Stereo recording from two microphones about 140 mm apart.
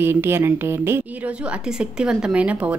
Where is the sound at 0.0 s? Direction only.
15° right (ahead or behind).